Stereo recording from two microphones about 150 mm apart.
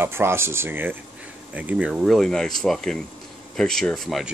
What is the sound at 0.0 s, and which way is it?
Speech, 15° right (ahead or behind).